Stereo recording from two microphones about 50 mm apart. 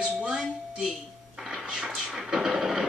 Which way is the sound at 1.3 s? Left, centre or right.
Centre.